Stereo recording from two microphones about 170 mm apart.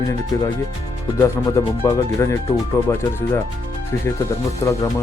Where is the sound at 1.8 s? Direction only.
15° left (ahead or behind).